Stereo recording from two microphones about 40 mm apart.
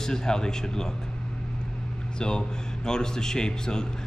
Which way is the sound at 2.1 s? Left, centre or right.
Left.